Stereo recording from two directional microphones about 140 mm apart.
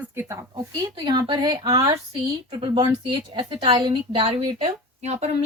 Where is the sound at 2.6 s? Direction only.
40° right (ahead or behind).